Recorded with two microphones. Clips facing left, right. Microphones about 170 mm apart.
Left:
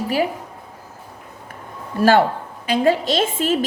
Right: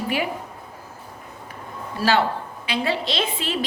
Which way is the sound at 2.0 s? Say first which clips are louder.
Left 6 dB; 50° left (ahead or behind).